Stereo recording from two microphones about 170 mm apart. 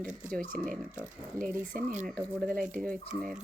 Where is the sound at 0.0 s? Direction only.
50° right (ahead or behind).